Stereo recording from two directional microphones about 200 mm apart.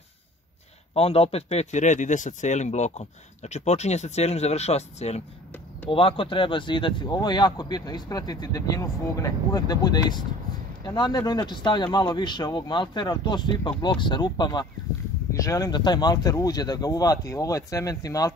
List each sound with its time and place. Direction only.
0.9 s speech: 30° left (ahead or behind)